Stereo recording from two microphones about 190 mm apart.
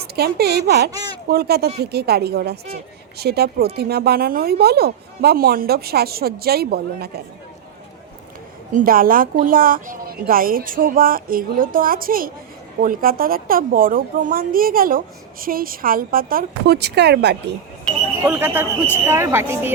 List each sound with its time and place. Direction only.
0.2 s a woman's voice: 55° right (ahead or behind)
0.9 s speech: 20° right (ahead or behind)
1.3 s a woman's voice: 55° right (ahead or behind)
8.7 s a woman's voice: 50° right (ahead or behind)
18.3 s speech: 10° right (ahead or behind)